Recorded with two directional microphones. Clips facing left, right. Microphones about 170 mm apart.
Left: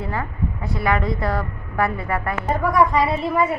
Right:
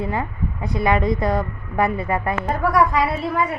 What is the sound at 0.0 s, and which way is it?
A woman's voice, 20° right (ahead or behind).